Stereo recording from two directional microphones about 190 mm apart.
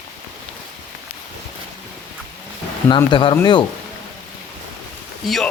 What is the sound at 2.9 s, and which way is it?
Speech, 25° left (ahead or behind).